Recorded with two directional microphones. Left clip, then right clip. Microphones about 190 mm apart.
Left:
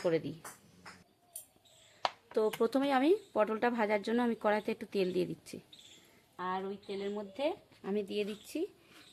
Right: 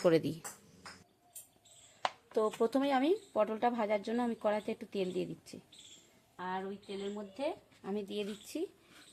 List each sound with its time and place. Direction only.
0.0 s speech: 30° right (ahead or behind)
2.0 s speech: 10° left (ahead or behind)
6.3 s speech: 45° left (ahead or behind)
7.8 s speech: 25° left (ahead or behind)
8.0 s speech: 10° left (ahead or behind)